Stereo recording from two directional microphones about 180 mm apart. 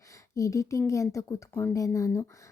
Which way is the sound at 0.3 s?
15° left (ahead or behind).